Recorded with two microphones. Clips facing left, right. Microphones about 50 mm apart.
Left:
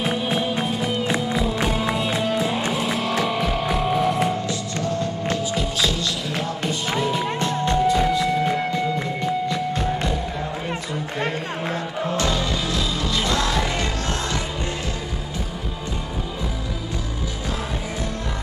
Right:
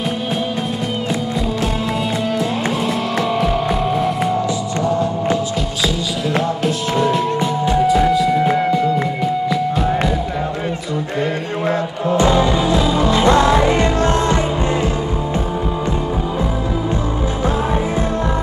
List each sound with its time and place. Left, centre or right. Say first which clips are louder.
1.3 s music: right 2 dB; centre
6.6 s music: right 6 dB; centre
7.3 s music: right 5 dB; centre
12.2 s music: right 11 dB; right